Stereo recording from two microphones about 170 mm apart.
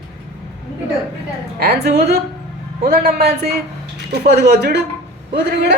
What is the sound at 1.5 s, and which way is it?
A man's voice, 70° right (ahead or behind).